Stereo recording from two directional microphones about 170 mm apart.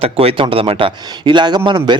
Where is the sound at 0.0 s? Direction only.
35° right (ahead or behind).